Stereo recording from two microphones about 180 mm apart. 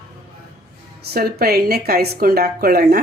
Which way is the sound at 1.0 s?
60° right (ahead or behind).